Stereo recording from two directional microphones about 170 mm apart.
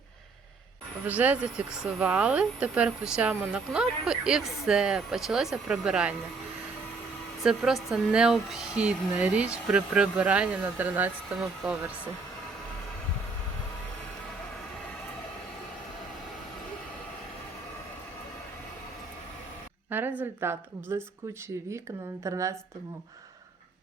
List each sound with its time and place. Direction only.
1.0 s speech: 10° right (ahead or behind)
7.4 s speech: centre (ahead or behind)
19.9 s a woman's voice: 10° right (ahead or behind)
22.2 s a woman's voice: 20° right (ahead or behind)